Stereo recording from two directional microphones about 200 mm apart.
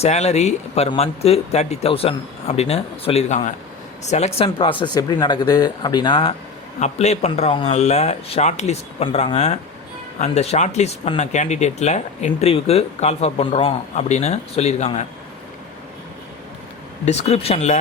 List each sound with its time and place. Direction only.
0.0 s speech: 35° left (ahead or behind)
6.7 s speech: 35° left (ahead or behind)
17.1 s speech: 30° left (ahead or behind)